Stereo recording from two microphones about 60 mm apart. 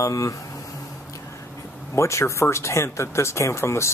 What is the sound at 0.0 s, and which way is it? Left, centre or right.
Speech, left.